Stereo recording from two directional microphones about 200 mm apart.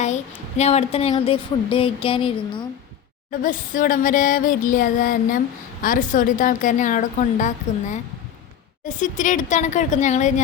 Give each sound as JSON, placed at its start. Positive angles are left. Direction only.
{"t": 0.0, "sound": "a woman's voice", "side_deg": 35}
{"t": 3.4, "sound": "a sound", "side_deg": 40}
{"t": 5.8, "sound": "a woman's voice", "side_deg": 45}